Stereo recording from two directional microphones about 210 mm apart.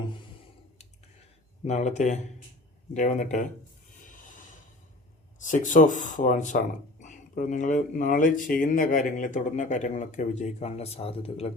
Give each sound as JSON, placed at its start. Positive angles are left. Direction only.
{"t": 1.6, "sound": "speech", "side_deg": 35}
{"t": 5.4, "sound": "speech", "side_deg": 35}